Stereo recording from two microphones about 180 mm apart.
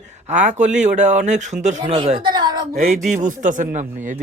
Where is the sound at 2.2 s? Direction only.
25° right (ahead or behind).